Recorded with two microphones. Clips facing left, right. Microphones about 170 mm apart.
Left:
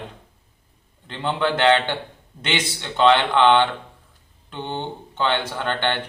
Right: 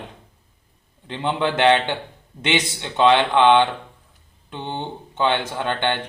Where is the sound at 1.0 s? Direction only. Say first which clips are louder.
Right 1 dB; 20° right (ahead or behind).